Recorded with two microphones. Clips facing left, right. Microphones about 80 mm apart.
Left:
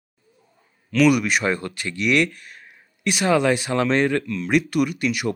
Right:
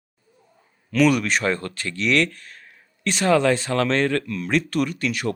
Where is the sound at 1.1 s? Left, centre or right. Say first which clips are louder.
Left 1 dB; centre.